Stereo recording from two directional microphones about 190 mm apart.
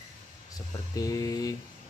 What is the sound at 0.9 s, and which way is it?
Speech, 20° left (ahead or behind).